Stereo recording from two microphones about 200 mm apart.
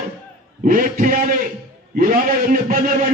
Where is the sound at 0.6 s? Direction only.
45° right (ahead or behind).